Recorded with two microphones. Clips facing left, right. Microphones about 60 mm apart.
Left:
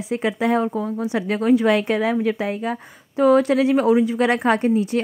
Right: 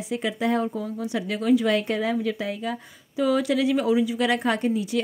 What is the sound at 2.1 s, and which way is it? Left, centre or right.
Speech, left.